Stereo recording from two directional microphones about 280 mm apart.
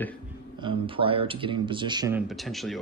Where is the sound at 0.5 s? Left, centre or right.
Centre.